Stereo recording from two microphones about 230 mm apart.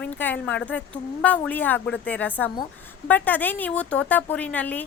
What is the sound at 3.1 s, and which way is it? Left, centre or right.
A woman's voice, centre.